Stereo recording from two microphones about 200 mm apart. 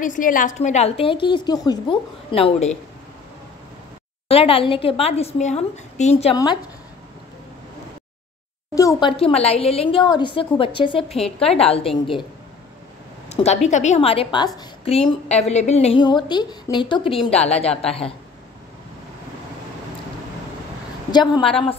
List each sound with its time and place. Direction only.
0.0 s a woman's voice: 40° left (ahead or behind)
4.3 s a woman's voice: 30° left (ahead or behind)
6.3 s a woman's voice: 20° left (ahead or behind)
8.7 s a sound: 15° left (ahead or behind)
9.1 s a woman's voice: 30° left (ahead or behind)
13.3 s a woman's voice: 30° left (ahead or behind)
21.1 s a woman's voice: 20° left (ahead or behind)